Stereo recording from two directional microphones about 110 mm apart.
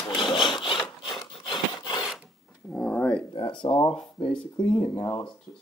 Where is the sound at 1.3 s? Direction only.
50° left (ahead or behind).